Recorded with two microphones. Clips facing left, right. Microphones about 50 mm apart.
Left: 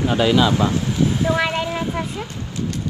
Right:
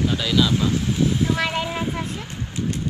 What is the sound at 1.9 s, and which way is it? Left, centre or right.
Speech, left.